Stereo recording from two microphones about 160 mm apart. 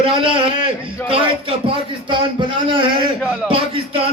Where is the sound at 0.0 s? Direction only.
35° right (ahead or behind).